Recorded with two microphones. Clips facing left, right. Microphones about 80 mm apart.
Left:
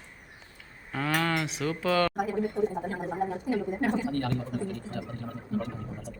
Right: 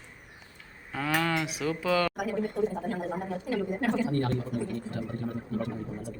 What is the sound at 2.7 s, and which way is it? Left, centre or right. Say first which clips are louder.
A woman's voice: even; left.